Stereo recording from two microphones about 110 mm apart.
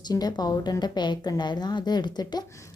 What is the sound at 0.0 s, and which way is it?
A woman's voice, 40° left (ahead or behind).